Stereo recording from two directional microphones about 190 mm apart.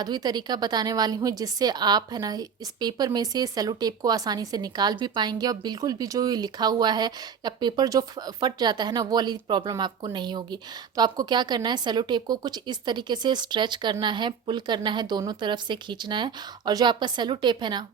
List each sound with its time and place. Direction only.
0.0 s a woman's voice: 20° right (ahead or behind)